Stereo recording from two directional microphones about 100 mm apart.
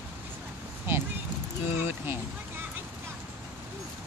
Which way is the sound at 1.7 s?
20° right (ahead or behind).